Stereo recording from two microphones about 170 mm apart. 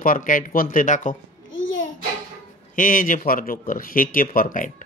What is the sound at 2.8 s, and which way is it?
Speech, 55° left (ahead or behind).